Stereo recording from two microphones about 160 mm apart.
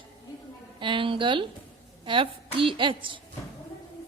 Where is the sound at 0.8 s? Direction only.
30° right (ahead or behind).